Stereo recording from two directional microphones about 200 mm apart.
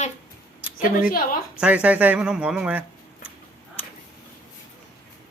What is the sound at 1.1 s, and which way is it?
Speech, 45° left (ahead or behind).